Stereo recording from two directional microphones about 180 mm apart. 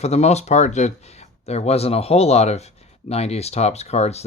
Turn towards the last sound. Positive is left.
turn(degrees=35)  # may be behind; listen again after turning